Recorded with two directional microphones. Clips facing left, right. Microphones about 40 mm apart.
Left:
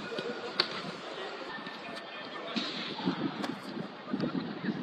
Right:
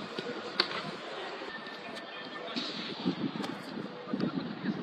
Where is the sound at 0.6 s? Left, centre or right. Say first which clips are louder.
Right 1 dB; centre.